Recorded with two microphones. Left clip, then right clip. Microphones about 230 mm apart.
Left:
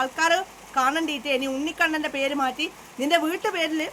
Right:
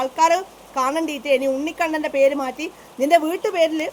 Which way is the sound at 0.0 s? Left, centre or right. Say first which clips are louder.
Right 4 dB; left.